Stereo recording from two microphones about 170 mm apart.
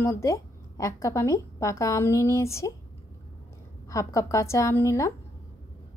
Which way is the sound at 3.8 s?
20° left (ahead or behind).